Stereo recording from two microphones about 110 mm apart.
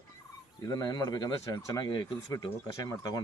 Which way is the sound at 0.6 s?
35° left (ahead or behind).